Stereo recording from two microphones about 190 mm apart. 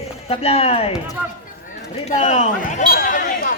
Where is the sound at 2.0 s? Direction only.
35° left (ahead or behind).